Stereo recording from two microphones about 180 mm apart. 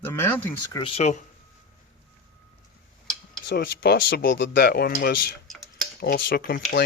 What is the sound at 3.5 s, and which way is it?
Speech, 65° left (ahead or behind).